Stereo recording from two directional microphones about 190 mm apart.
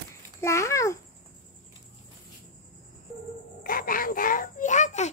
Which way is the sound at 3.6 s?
50° left (ahead or behind).